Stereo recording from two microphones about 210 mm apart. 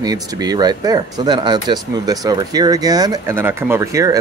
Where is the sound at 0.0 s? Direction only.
20° right (ahead or behind).